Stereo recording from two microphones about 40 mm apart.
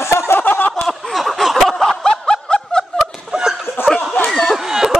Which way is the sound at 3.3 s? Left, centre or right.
Centre.